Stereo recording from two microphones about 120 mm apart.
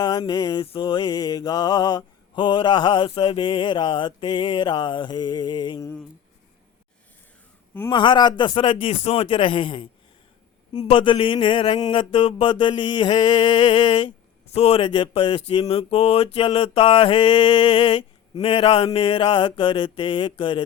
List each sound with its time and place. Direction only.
0.0 s mantra: 35° left (ahead or behind)
7.9 s mantra: 40° left (ahead or behind)
14.5 s a man's voice: 55° left (ahead or behind)
14.8 s mantra: 45° left (ahead or behind)